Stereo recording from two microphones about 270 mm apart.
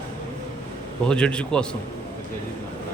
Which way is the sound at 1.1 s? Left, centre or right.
Centre.